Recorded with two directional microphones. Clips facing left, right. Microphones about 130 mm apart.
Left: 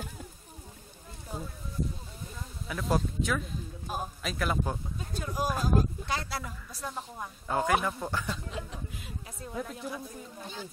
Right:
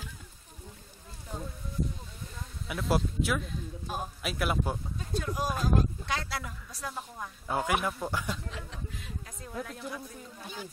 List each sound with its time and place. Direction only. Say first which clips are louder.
1.3 s speech: left 1 dB; 5° left (ahead or behind)
2.7 s speech: even; 5° right (ahead or behind)
5.1 s speech: even; 5° left (ahead or behind)
7.4 s speech: left 2 dB; 5° right (ahead or behind)
8.7 s speech: even; 5° left (ahead or behind)
10.4 s speech: even; 10° right (ahead or behind)